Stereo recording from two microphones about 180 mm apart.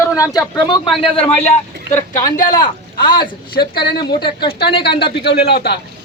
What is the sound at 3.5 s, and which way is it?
Speech, 60° left (ahead or behind).